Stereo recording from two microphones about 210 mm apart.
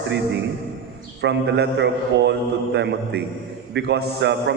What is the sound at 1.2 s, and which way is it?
Speech, 55° right (ahead or behind).